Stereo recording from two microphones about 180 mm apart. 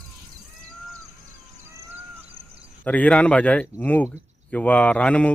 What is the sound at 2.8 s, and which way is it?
Speech, 10° left (ahead or behind).